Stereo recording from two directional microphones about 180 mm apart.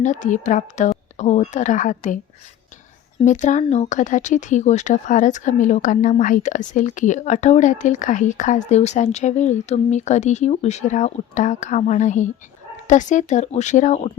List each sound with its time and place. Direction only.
0.0 s a woman's voice: 45° left (ahead or behind)
3.2 s speech: 40° left (ahead or behind)